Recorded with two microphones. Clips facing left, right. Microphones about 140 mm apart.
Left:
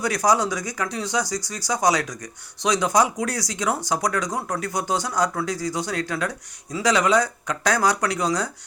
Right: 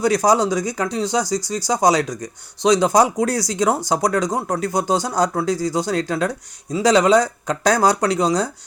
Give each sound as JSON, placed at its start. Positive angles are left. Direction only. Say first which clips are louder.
{"t": 0.0, "sound": "speech", "louder": "right 5 dB", "side_deg": -25}